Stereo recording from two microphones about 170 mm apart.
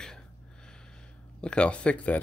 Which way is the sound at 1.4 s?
5° left (ahead or behind).